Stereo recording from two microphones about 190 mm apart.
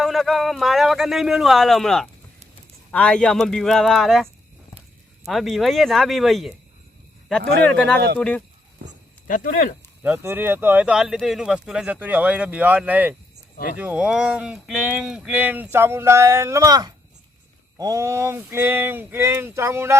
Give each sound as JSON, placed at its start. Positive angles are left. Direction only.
{"t": 0.0, "sound": "speech", "side_deg": 0}
{"t": 7.6, "sound": "speech", "side_deg": 5}
{"t": 9.2, "sound": "speech", "side_deg": 45}
{"t": 10.0, "sound": "speech", "side_deg": -10}